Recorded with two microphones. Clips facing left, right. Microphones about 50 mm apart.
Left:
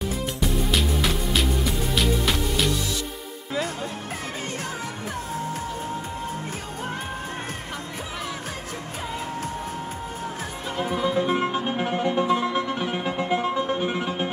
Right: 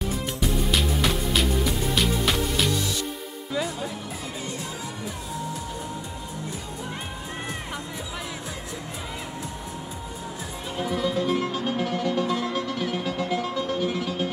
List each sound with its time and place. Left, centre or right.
0.4 s music: centre
3.5 s music: left
10.8 s music: left